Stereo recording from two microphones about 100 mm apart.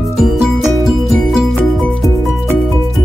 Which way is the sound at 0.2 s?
Centre (ahead or behind).